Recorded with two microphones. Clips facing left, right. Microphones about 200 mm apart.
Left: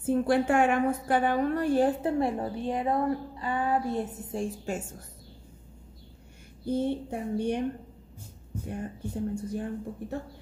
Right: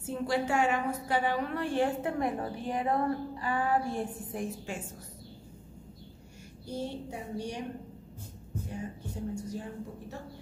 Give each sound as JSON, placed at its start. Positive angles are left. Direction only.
{"t": 0.0, "sound": "a woman's voice", "side_deg": 55}
{"t": 4.7, "sound": "a woman's voice", "side_deg": 45}
{"t": 6.6, "sound": "speech", "side_deg": 55}
{"t": 8.6, "sound": "speech", "side_deg": 55}